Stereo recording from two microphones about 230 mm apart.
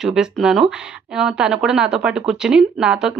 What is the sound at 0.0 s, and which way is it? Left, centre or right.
Speech, centre.